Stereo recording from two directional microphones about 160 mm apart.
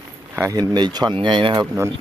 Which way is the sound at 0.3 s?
20° right (ahead or behind).